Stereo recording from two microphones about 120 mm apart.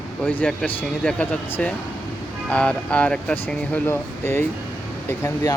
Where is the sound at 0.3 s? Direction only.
15° left (ahead or behind).